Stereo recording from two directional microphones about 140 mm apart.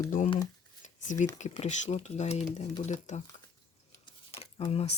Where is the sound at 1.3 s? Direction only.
60° left (ahead or behind).